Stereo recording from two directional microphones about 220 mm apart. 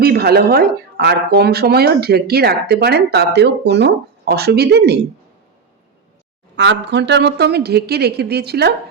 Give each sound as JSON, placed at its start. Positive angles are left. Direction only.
{"t": 0.0, "sound": "speech", "side_deg": -45}
{"t": 6.6, "sound": "speech", "side_deg": -50}